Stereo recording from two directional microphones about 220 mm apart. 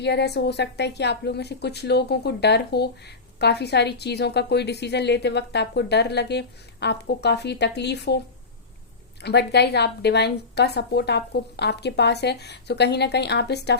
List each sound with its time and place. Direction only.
0.0 s a woman's voice: 50° left (ahead or behind)
9.2 s a woman's voice: 50° left (ahead or behind)